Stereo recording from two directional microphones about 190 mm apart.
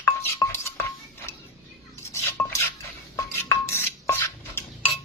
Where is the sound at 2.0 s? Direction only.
15° left (ahead or behind).